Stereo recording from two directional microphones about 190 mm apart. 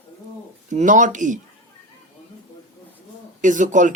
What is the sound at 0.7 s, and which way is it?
Speech, 40° right (ahead or behind).